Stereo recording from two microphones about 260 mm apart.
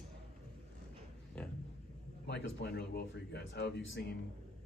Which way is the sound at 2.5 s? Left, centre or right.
Left.